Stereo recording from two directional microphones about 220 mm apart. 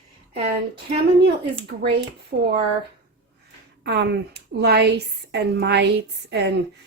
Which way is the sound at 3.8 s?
50° right (ahead or behind).